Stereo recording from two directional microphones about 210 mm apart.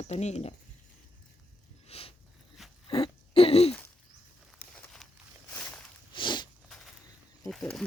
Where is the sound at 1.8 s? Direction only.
25° left (ahead or behind).